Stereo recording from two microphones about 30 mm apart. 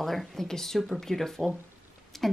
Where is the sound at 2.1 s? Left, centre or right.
Centre.